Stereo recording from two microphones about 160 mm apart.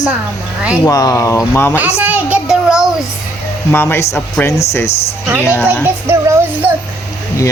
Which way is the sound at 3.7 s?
15° left (ahead or behind).